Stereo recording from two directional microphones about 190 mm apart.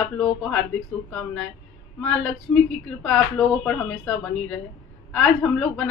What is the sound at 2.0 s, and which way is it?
A woman's voice, 5° left (ahead or behind).